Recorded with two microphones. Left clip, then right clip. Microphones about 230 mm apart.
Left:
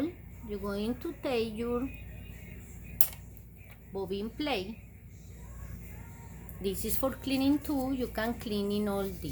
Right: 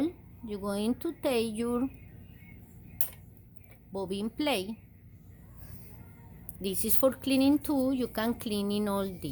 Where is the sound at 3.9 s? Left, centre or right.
Right.